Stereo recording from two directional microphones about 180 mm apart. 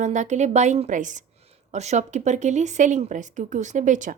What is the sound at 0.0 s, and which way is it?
A woman's voice, 45° right (ahead or behind).